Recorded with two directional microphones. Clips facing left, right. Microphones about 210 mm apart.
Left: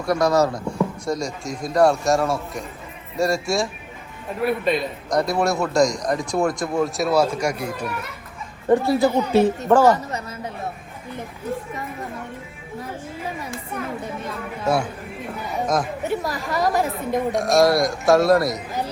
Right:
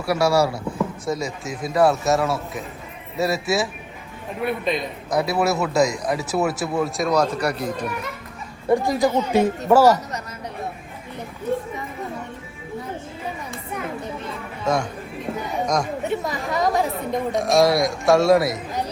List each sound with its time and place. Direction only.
0.0 s a man's voice: 10° right (ahead or behind); by 7.9 s 10° left (ahead or behind)
8.7 s speech: 15° right (ahead or behind)
14.6 s a man's voice: 10° left (ahead or behind)